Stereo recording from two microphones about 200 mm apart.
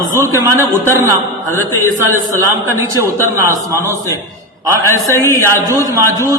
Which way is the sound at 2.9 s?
15° right (ahead or behind).